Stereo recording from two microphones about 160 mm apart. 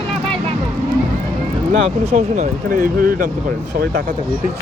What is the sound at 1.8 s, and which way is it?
Speech, 45° right (ahead or behind).